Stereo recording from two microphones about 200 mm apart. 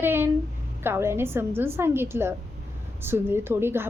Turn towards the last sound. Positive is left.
turn(degrees=-10)  # may be behind; listen again after turning